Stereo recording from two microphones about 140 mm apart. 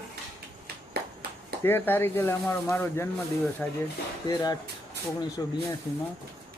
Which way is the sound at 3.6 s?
5° left (ahead or behind).